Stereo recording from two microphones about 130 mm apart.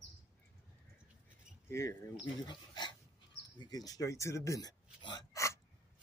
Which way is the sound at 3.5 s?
30° left (ahead or behind).